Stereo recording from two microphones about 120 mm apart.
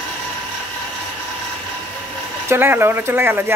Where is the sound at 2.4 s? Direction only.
20° right (ahead or behind).